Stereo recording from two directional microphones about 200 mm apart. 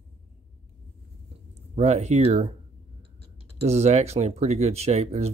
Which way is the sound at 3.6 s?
30° right (ahead or behind).